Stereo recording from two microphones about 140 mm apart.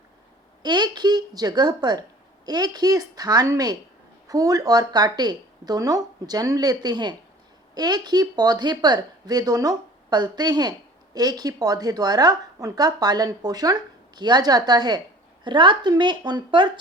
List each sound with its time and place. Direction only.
0.6 s speech: 30° right (ahead or behind)